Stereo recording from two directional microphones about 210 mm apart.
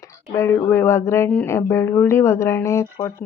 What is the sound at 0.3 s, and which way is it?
Speech, 15° left (ahead or behind).